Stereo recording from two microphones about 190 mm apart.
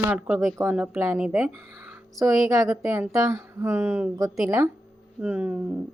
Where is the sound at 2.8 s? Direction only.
15° right (ahead or behind).